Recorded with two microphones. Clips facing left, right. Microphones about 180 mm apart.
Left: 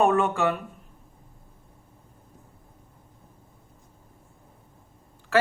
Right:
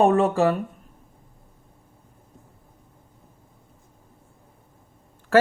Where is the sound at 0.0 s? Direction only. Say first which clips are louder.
Right 4 dB; 35° right (ahead or behind).